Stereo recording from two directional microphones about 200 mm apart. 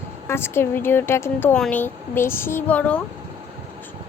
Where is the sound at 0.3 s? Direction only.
10° left (ahead or behind).